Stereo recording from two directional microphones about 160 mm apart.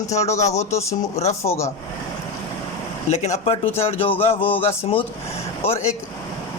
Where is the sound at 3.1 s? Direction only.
40° left (ahead or behind).